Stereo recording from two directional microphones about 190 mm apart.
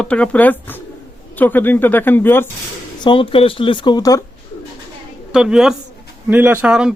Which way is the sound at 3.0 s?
25° left (ahead or behind).